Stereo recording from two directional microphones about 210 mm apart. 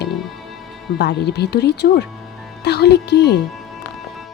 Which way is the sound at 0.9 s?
50° left (ahead or behind).